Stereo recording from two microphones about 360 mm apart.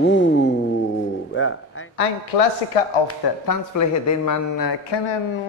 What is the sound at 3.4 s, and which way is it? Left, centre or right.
Speech, left.